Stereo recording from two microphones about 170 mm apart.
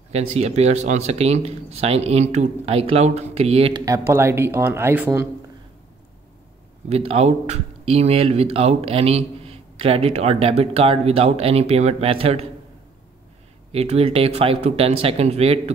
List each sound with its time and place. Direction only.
0.1 s speech: 40° right (ahead or behind)
3.8 s speech: 15° right (ahead or behind)
6.9 s speech: 35° right (ahead or behind)
13.7 s speech: 35° right (ahead or behind)